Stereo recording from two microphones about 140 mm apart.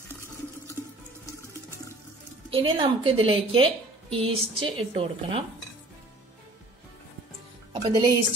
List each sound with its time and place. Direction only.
2.5 s a woman's voice: 40° right (ahead or behind)
7.7 s speech: 35° right (ahead or behind)